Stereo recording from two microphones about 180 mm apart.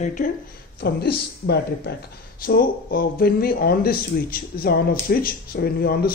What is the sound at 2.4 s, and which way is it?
Speech, 55° left (ahead or behind).